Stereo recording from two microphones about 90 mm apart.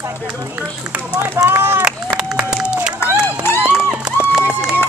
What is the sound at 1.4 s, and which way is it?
Run, 25° right (ahead or behind).